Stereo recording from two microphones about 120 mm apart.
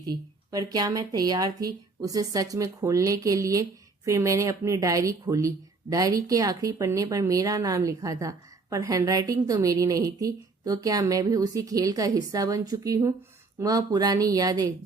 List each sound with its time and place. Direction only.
0.0 s speech: 35° right (ahead or behind)